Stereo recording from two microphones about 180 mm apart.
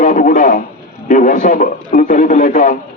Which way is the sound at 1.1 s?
45° left (ahead or behind).